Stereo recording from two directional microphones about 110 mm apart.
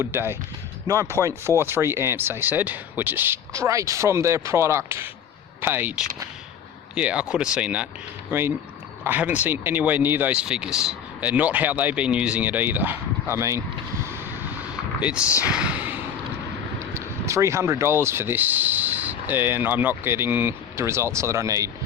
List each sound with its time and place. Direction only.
0.0 s speech: 20° right (ahead or behind)
3.5 s speech: 30° right (ahead or behind)
6.9 s speech: 10° right (ahead or behind)
16.9 s speech: 25° right (ahead or behind)